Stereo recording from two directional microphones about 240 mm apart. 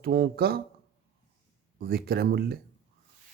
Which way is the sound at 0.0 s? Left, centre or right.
Right.